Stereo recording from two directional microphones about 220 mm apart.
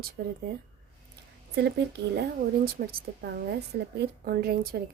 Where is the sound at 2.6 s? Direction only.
45° right (ahead or behind).